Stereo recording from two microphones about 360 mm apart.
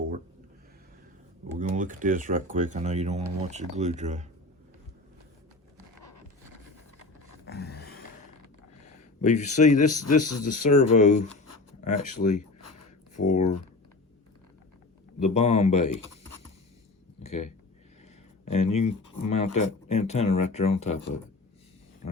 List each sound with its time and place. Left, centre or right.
1.5 s speech: right
7.4 s a sound: left
9.2 s speech: centre
15.2 s speech: centre
17.2 s speech: centre
18.5 s speech: centre